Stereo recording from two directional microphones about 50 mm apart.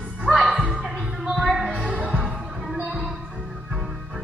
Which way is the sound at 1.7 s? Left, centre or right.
Centre.